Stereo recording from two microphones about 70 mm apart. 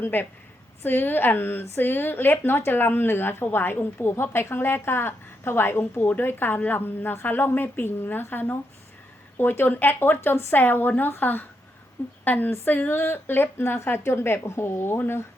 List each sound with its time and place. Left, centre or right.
0.0 s speech: left